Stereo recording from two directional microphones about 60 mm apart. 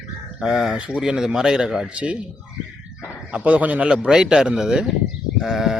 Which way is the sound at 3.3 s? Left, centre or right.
Right.